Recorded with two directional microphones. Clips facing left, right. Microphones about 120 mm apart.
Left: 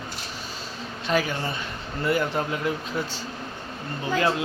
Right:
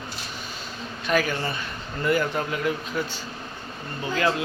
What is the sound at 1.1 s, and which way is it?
Speech, 20° left (ahead or behind).